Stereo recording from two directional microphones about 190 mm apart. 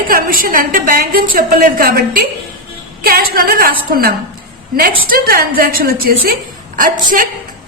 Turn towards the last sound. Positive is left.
turn(degrees=-45)  # may be behind; listen again after turning